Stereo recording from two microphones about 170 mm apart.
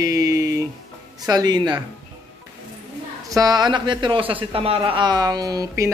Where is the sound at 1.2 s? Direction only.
25° right (ahead or behind).